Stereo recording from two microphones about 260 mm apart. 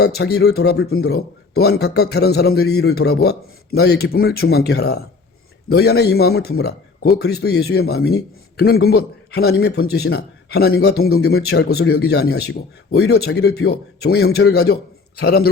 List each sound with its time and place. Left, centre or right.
0.0 s speech: left